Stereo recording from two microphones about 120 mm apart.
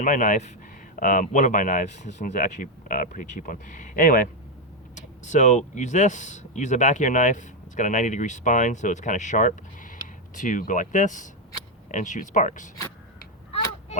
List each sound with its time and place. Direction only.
0.0 s speech: 90° left